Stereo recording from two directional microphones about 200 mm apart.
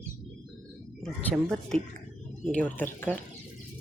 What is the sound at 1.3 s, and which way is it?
Speech, centre (ahead or behind).